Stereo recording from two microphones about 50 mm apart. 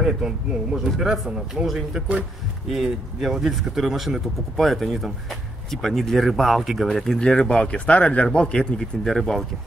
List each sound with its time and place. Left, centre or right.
0.0 s a man's voice: centre